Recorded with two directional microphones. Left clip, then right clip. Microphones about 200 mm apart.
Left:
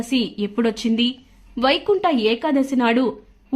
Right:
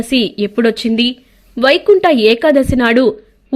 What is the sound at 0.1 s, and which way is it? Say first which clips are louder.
A woman's voice: right 9 dB; 20° right (ahead or behind).